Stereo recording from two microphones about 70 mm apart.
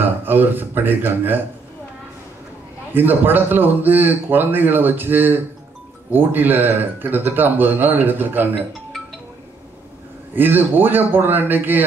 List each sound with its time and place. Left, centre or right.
0.0 s speech: right
2.9 s speech: right
10.3 s speech: right